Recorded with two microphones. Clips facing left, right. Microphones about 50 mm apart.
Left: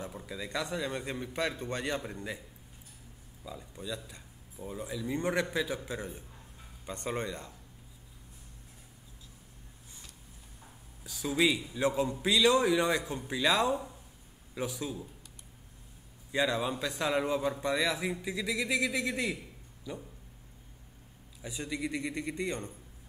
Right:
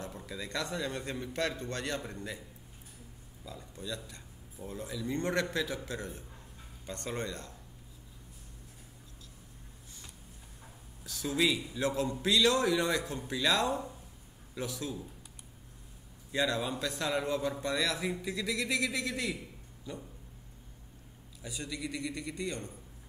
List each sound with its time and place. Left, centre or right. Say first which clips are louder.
0.3 s a man's voice: left 1 dB; centre
3.4 s a man's voice: left 1 dB; centre
11.1 s a man's voice: left 2 dB; centre
16.3 s a man's voice: left 2 dB; centre
21.4 s a man's voice: left 3 dB; left